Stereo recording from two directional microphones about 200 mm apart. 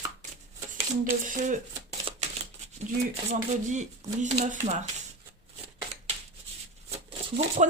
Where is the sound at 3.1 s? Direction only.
35° right (ahead or behind).